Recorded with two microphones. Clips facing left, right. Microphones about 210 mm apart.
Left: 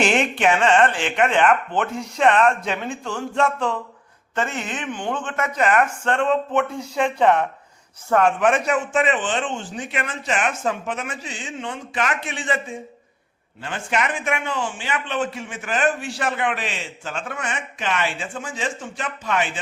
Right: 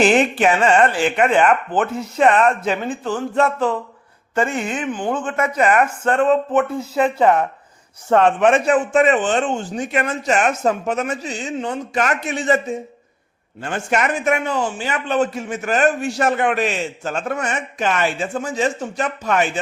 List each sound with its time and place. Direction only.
0.3 s speech: 5° right (ahead or behind)
8.1 s a man's voice: 25° right (ahead or behind); by 19.5 s 45° right (ahead or behind)